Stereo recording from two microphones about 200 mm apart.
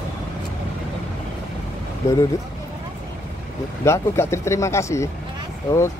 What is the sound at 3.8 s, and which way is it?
Speech, 15° left (ahead or behind).